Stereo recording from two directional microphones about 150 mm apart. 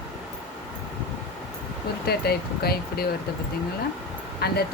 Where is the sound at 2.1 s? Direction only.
90° left.